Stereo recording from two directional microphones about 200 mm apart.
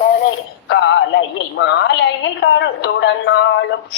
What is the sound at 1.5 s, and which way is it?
Speech, 65° left (ahead or behind).